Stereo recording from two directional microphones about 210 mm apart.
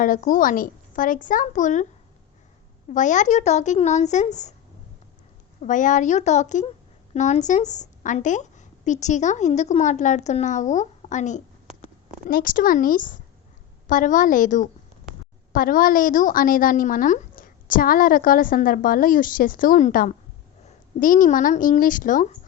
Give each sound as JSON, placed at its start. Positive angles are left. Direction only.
{"t": 0.0, "sound": "a woman's voice", "side_deg": 40}
{"t": 2.9, "sound": "a woman's voice", "side_deg": 35}
{"t": 5.6, "sound": "a woman's voice", "side_deg": 35}